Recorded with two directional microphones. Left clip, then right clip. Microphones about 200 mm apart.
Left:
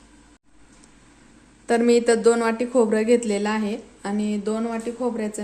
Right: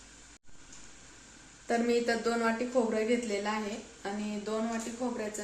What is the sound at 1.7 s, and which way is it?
Speech, 55° left (ahead or behind).